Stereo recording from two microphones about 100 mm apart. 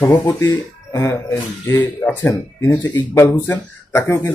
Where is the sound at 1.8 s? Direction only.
20° left (ahead or behind).